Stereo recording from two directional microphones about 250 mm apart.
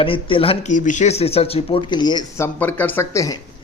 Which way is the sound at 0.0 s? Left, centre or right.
Left.